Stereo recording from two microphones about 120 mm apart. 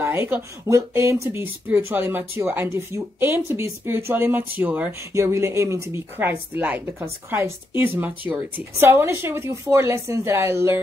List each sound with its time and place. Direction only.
0.0 s a woman's voice: 20° right (ahead or behind)
5.1 s a woman's voice: 25° right (ahead or behind)